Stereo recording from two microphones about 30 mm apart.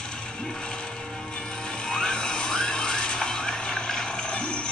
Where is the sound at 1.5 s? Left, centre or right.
Left.